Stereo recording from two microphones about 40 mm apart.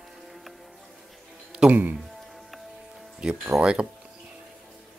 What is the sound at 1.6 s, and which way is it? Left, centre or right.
Music, centre.